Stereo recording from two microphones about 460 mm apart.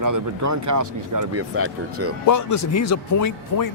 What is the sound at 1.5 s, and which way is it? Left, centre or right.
Speech, right.